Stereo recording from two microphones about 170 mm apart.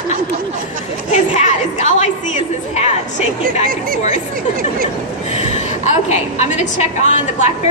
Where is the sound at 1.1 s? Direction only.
45° left (ahead or behind).